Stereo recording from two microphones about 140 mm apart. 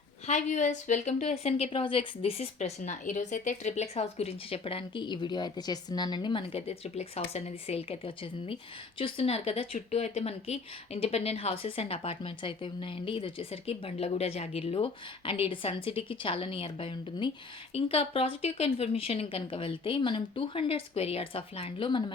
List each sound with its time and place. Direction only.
0.3 s speech: 55° left (ahead or behind); by 2.5 s 40° left (ahead or behind)
2.6 s speech: 60° left (ahead or behind); by 6.6 s 35° left (ahead or behind)
6.7 s a woman's voice: 45° left (ahead or behind)